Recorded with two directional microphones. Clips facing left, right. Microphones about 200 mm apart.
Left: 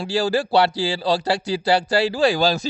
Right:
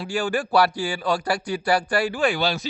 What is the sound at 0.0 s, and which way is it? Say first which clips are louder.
A man's voice: left 4 dB; 30° left (ahead or behind).